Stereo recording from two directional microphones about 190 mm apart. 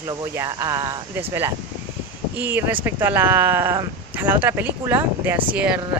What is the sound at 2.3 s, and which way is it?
Speech, 10° right (ahead or behind).